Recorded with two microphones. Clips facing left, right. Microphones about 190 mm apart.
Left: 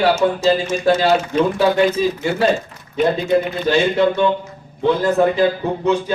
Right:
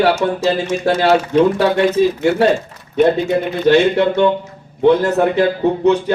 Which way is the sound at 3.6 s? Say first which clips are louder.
Right 7 dB; 65° right (ahead or behind).